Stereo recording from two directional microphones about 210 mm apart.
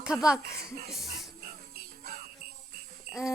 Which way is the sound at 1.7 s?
45° right (ahead or behind).